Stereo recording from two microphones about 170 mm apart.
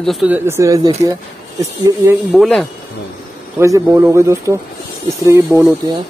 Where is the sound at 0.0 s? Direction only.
Centre (ahead or behind).